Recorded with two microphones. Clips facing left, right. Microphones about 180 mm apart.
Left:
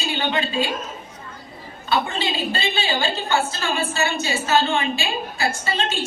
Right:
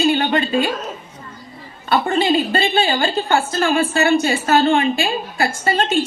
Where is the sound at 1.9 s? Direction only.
50° right (ahead or behind).